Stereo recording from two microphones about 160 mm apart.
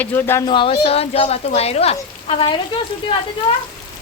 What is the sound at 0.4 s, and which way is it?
Speech, 30° left (ahead or behind).